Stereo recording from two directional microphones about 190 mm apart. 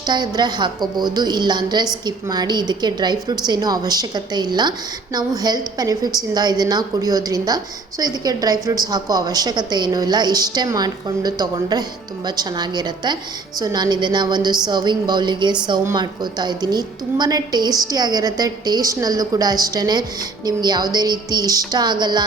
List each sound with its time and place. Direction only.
0.0 s a woman's voice: 25° right (ahead or behind)